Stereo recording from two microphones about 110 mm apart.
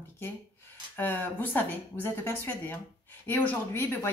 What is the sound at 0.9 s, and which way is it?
Speech, 15° left (ahead or behind).